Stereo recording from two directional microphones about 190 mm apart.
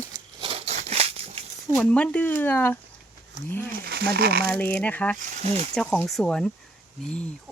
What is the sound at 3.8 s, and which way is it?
Speech, 55° right (ahead or behind).